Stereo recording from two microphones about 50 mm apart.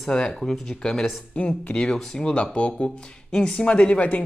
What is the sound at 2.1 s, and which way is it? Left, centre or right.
Speech, centre.